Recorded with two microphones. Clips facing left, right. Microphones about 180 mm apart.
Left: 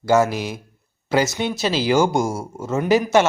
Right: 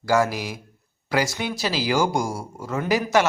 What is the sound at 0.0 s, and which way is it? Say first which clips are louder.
Speech: left 4 dB; 25° left (ahead or behind).